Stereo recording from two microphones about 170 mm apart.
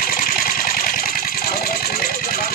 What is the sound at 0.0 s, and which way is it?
Sewing machine, 55° left (ahead or behind).